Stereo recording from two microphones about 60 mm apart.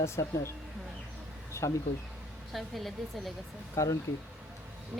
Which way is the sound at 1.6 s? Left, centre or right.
Left.